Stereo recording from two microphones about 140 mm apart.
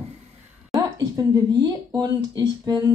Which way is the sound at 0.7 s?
25° right (ahead or behind).